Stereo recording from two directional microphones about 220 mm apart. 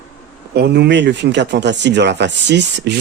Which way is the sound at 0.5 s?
50° right (ahead or behind).